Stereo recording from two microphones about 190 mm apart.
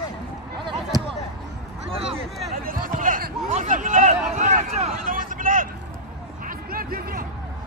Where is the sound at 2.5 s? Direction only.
50° right (ahead or behind).